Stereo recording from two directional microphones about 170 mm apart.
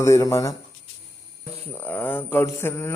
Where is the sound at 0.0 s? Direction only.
15° left (ahead or behind).